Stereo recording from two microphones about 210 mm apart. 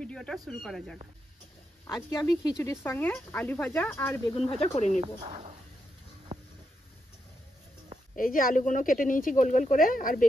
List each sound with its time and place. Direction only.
0.0 s speech: 5° left (ahead or behind)
1.9 s speech: 10° left (ahead or behind)
4.4 s speech: 30° left (ahead or behind)
5.0 s speech: 25° right (ahead or behind)
8.2 s speech: 40° left (ahead or behind)